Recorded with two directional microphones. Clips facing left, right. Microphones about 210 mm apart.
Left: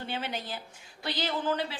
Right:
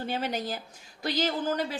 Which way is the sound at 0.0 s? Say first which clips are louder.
Right 5 dB; 40° right (ahead or behind).